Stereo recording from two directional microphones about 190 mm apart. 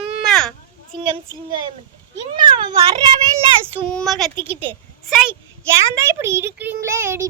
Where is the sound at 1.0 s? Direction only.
25° right (ahead or behind).